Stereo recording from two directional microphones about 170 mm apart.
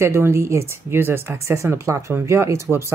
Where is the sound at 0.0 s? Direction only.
15° right (ahead or behind).